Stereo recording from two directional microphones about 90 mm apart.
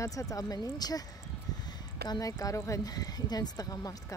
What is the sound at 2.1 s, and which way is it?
Speech, 40° left (ahead or behind).